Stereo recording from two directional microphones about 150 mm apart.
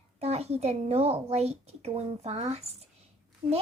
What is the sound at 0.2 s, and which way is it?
A child's voice, 45° right (ahead or behind).